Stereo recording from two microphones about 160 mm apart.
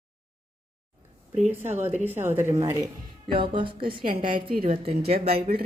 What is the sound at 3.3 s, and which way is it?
Speech, 30° right (ahead or behind).